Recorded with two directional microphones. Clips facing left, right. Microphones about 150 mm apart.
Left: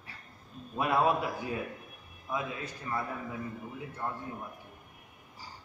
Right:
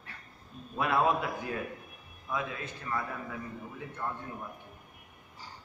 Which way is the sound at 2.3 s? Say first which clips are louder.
Even; 15° left (ahead or behind).